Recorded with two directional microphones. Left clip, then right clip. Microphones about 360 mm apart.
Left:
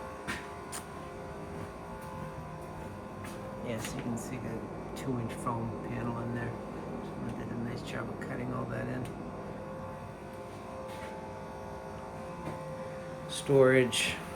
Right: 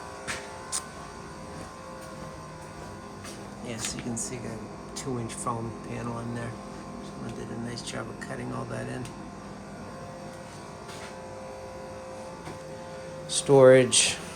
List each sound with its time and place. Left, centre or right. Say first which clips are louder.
5.5 s speech: right 4 dB; centre
7.7 s speech: right 3 dB; centre
13.3 s speech: right 8 dB; centre